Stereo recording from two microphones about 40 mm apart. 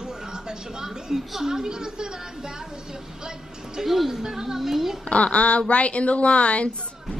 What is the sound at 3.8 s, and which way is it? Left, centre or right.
Speech, centre.